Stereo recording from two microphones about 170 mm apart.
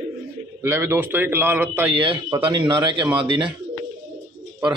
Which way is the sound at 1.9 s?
30° right (ahead or behind).